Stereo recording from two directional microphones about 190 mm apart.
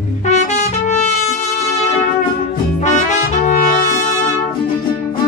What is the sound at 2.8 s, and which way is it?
Brass instrument, 40° left (ahead or behind).